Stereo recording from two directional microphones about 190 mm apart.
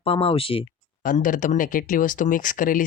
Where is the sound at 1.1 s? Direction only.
45° left (ahead or behind).